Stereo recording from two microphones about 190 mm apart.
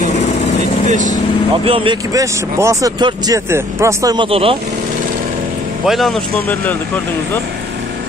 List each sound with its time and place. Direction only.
0.8 s speech: 40° right (ahead or behind)
1.7 s a man's voice: 25° right (ahead or behind)
5.9 s speech: centre (ahead or behind)